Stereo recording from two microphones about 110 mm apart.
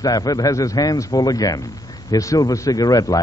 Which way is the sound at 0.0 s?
35° left (ahead or behind).